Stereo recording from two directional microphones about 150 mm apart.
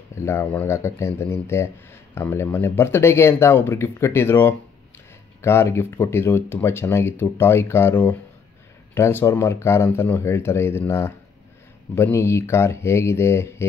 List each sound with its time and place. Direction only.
0.1 s speech: 15° left (ahead or behind)